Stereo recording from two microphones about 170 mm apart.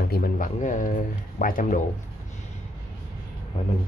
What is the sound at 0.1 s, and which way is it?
Speech, 50° left (ahead or behind).